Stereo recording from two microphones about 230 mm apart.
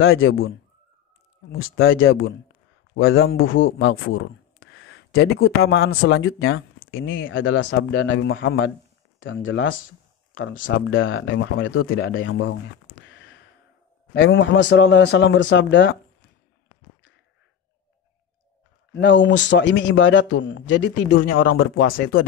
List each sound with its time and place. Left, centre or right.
0.0 s speech: left
1.6 s speech: left
5.1 s a man's voice: left
5.9 s a man's voice: left
18.9 s a man's voice: left
21.1 s speech: left
21.8 s speech: left